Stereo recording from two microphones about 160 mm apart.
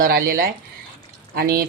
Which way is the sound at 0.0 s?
70° right (ahead or behind).